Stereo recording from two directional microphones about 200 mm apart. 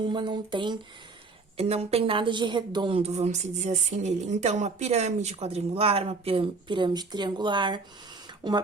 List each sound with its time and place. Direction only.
0.0 s a woman's voice: 25° right (ahead or behind)